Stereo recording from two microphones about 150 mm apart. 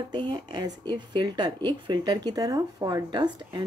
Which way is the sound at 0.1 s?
30° right (ahead or behind).